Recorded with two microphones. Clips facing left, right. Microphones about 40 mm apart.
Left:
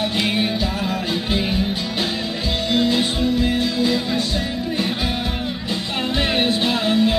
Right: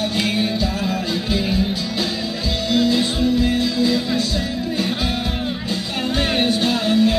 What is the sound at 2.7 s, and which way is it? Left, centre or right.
Music, left.